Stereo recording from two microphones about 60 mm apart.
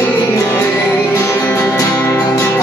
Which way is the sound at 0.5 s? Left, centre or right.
Left.